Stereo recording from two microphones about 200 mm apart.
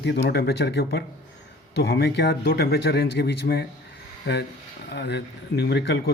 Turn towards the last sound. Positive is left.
turn(degrees=55)  # may be behind; listen again after turning